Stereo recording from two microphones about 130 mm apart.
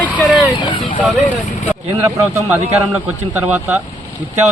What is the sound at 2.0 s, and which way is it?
Speech, 25° right (ahead or behind).